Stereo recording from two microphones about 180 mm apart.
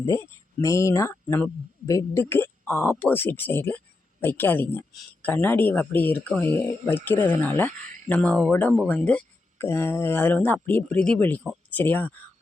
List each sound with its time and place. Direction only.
0.6 s speech: 15° left (ahead or behind)